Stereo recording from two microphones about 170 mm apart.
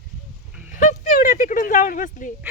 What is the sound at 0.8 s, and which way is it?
Speech, 50° left (ahead or behind).